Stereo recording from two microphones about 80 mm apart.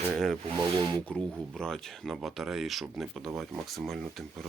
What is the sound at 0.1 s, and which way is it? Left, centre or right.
Speech, centre.